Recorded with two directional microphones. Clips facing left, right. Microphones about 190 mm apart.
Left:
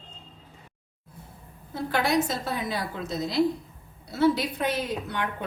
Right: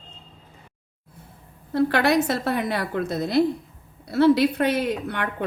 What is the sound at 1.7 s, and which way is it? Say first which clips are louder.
A woman's voice: right 5 dB; 70° right (ahead or behind).